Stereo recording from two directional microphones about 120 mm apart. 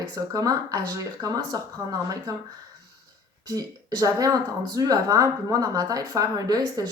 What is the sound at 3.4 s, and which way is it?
Speech, 30° right (ahead or behind).